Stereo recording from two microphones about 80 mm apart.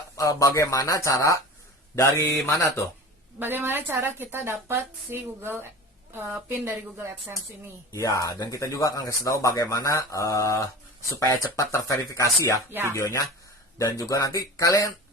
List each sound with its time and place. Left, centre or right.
0.2 s speech: left
3.3 s a woman's voice: right
7.9 s speech: left